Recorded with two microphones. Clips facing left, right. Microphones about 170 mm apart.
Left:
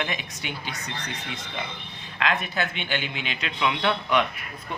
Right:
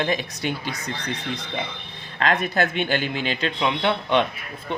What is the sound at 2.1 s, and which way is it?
Speech, 40° right (ahead or behind).